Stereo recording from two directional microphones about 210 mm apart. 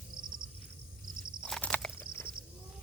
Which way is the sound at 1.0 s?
40° right (ahead or behind).